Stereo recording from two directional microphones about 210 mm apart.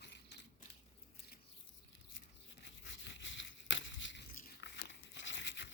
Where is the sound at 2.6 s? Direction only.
60° left (ahead or behind).